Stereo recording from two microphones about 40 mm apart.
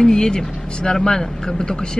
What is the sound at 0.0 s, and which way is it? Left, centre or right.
Speech, centre.